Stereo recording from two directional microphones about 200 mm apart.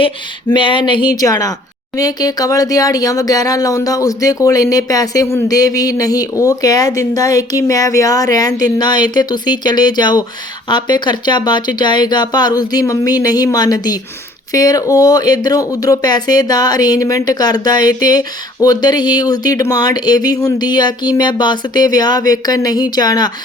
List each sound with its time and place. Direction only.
0.5 s speech: 25° left (ahead or behind)